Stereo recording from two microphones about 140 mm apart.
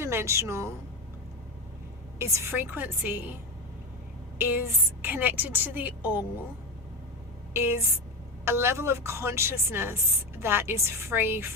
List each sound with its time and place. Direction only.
0.0 s a woman's voice: 20° right (ahead or behind)
2.1 s speech: 20° right (ahead or behind)
4.4 s speech: 15° right (ahead or behind)
7.5 s speech: 15° right (ahead or behind)